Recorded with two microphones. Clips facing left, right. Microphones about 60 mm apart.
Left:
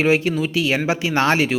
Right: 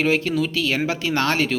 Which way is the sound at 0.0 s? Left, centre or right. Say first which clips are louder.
Left 2 dB; centre.